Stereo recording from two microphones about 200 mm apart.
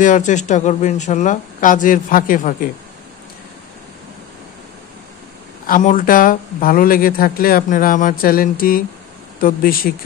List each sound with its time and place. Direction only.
0.0 s speech: 40° left (ahead or behind)
5.7 s speech: 40° left (ahead or behind)